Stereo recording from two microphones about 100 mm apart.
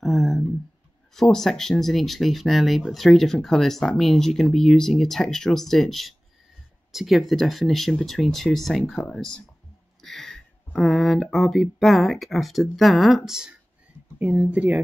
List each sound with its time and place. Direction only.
0.0 s a sound: centre (ahead or behind)
1.1 s speech: 5° left (ahead or behind)
14.1 s speech: 15° right (ahead or behind)